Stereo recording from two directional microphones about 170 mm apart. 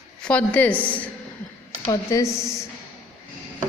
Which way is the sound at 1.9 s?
20° left (ahead or behind).